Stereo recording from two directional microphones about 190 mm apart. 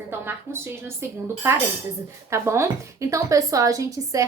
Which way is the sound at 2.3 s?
15° right (ahead or behind).